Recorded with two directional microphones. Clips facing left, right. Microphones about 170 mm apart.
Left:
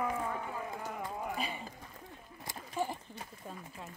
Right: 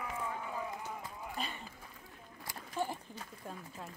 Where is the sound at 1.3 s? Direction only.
5° left (ahead or behind).